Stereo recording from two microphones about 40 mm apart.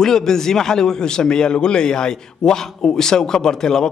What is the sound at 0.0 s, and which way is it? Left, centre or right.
A man's voice, centre.